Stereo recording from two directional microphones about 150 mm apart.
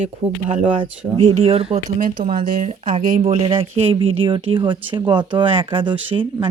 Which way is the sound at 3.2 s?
40° right (ahead or behind).